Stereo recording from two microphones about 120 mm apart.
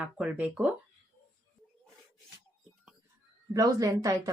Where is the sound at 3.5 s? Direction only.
30° right (ahead or behind).